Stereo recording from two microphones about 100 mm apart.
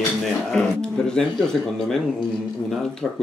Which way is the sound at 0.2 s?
5° left (ahead or behind).